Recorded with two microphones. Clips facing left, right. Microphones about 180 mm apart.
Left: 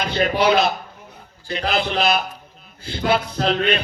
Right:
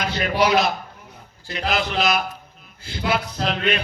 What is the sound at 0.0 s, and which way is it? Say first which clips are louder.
A man's voice: left 2 dB; 30° left (ahead or behind).